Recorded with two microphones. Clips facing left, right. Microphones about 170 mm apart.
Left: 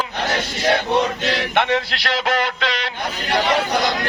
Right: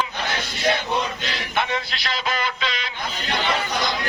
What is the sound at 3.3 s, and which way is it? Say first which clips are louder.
Speech: left 6 dB; 75° left (ahead or behind).